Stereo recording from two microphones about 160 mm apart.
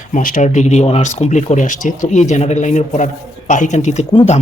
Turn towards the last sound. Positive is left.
turn(degrees=45)  # may be behind; listen again after turning